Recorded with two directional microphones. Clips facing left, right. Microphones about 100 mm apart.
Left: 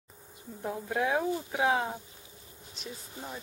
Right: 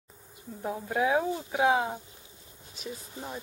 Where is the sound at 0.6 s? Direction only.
5° right (ahead or behind).